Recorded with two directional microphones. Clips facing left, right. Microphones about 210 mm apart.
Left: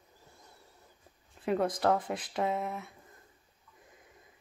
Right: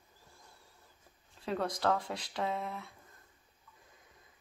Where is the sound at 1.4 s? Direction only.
20° left (ahead or behind).